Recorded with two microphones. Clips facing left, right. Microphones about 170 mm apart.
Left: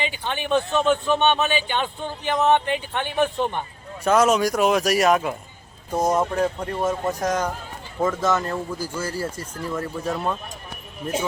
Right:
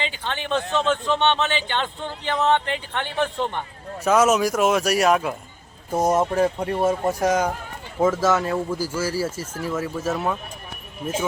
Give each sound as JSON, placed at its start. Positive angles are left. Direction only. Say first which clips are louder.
{"t": 0.0, "sound": "speech", "louder": "left 1 dB", "side_deg": 15}
{"t": 4.0, "sound": "speech", "louder": "even", "side_deg": -5}